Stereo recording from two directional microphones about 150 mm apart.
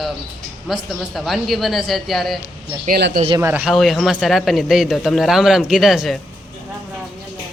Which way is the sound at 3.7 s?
Centre (ahead or behind).